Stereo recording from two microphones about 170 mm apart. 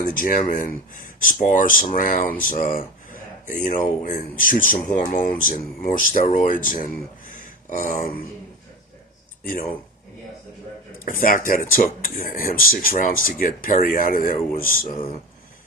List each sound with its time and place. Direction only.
0.2 s speech: 50° left (ahead or behind)
2.5 s a sound: 55° left (ahead or behind)
3.6 s speech: 50° left (ahead or behind)
7.3 s a sound: 50° left (ahead or behind)
9.4 s speech: 55° left (ahead or behind)
11.0 s speech: 50° left (ahead or behind)